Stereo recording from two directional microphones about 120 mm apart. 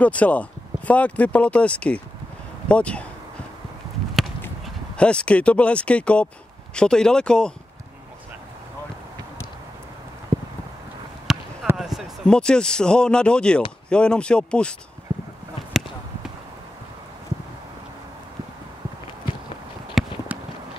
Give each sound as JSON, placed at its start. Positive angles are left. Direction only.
{"t": 0.0, "sound": "speech", "side_deg": 10}
{"t": 4.9, "sound": "speech", "side_deg": 10}
{"t": 11.3, "sound": "basketball bounce", "side_deg": -5}
{"t": 11.7, "sound": "a man's voice", "side_deg": -5}
{"t": 15.1, "sound": "a sound", "side_deg": -70}
{"t": 20.0, "sound": "clip-clop", "side_deg": 0}